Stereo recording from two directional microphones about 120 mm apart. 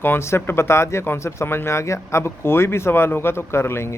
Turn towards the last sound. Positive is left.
turn(degrees=20)  # may be behind; listen again after turning